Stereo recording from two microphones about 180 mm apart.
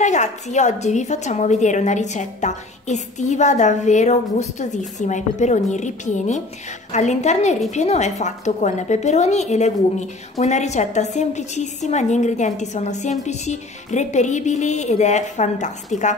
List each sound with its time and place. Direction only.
0.0 s a woman's voice: 40° left (ahead or behind)